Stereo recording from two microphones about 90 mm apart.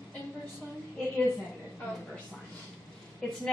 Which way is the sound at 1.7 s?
15° left (ahead or behind).